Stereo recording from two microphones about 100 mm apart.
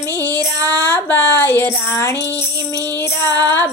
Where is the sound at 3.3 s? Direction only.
40° right (ahead or behind).